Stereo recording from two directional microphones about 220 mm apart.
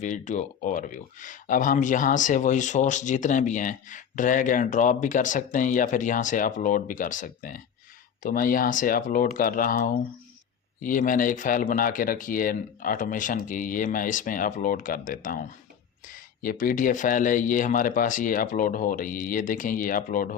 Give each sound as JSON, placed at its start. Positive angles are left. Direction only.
{"t": 0.0, "sound": "speech", "side_deg": 35}